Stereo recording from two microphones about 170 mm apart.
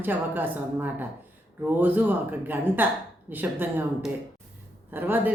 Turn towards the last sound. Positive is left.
turn(degrees=-10)  # may be behind; listen again after turning